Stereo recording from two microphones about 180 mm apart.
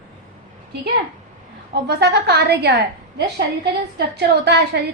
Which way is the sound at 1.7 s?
65° right (ahead or behind).